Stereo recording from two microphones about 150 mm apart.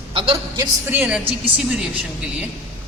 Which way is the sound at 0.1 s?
30° right (ahead or behind).